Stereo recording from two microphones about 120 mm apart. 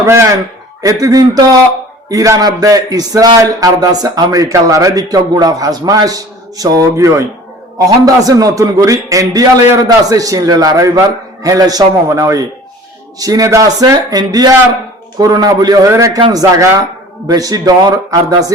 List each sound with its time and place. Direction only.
0.0 s a man's voice: 25° right (ahead or behind)